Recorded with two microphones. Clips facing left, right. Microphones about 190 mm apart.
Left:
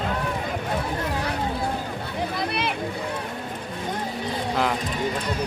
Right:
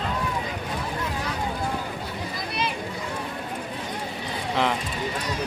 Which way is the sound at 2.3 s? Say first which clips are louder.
Left 2 dB; 65° left (ahead or behind).